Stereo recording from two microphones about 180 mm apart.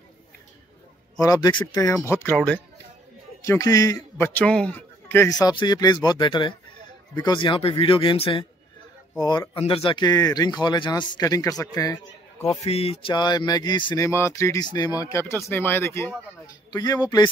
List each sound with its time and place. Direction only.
1.2 s speech: 20° left (ahead or behind)
2.2 s speech: 10° left (ahead or behind)
12.5 s a man's voice: 35° left (ahead or behind)